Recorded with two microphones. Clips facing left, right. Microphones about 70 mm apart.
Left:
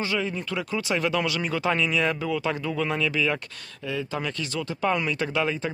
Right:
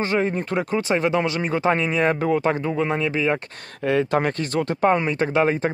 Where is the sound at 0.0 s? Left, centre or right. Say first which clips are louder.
Right 6 dB; right.